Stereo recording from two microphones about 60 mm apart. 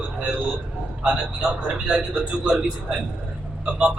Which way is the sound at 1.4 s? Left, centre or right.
Centre.